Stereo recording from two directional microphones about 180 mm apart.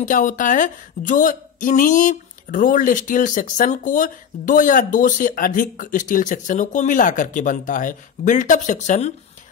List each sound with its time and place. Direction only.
0.0 s a woman's voice: 45° left (ahead or behind)